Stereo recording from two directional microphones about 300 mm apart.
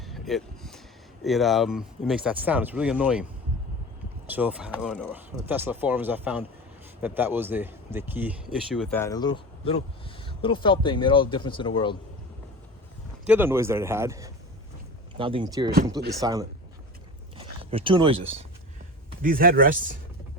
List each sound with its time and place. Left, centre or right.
0.0 s a sound: centre
1.2 s speech: centre
4.3 s a man's voice: centre
13.2 s a man's voice: centre
17.3 s zipper: centre
19.2 s speech: right